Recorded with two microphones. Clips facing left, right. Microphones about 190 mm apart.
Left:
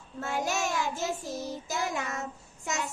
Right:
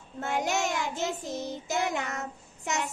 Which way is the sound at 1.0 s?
20° right (ahead or behind).